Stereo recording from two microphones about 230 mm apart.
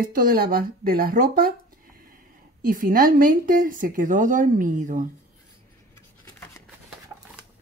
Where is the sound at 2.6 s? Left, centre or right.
Right.